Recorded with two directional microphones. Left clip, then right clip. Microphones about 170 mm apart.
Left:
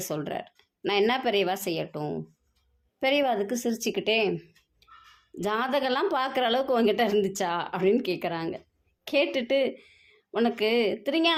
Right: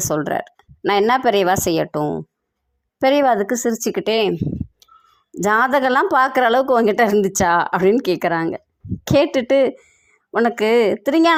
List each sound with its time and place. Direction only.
0.0 s a woman's voice: 40° right (ahead or behind)
4.8 s a sound: 55° right (ahead or behind)
5.3 s a woman's voice: 45° right (ahead or behind)